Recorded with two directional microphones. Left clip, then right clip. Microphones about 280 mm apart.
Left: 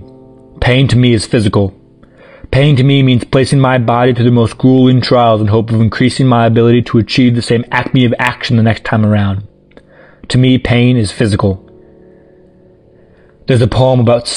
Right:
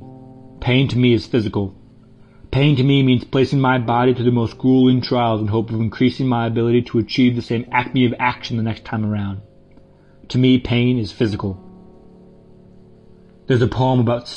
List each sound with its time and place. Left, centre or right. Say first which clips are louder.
0.6 s speech: left 7 dB; left
13.5 s speech: left 7 dB; left